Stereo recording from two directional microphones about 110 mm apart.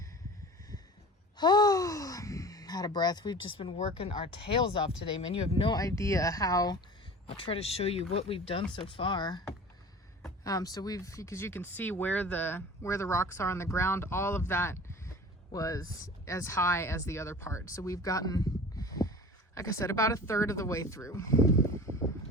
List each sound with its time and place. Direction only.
1.4 s sigh: 40° left (ahead or behind)
4.3 s speech: 55° left (ahead or behind)
5.7 s speech: 30° left (ahead or behind)
7.3 s speech: 55° left (ahead or behind)
10.4 s speech: 35° left (ahead or behind)
21.9 s a sound: 55° right (ahead or behind)